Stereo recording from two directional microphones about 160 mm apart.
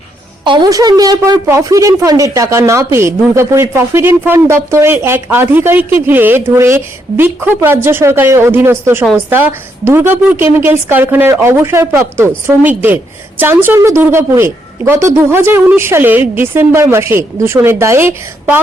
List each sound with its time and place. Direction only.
0.4 s a woman's voice: 30° right (ahead or behind)